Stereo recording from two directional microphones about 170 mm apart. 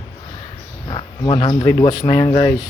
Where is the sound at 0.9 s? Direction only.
25° left (ahead or behind).